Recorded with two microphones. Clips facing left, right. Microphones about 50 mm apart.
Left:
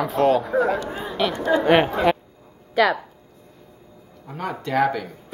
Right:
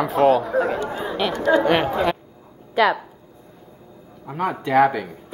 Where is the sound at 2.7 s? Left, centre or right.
Centre.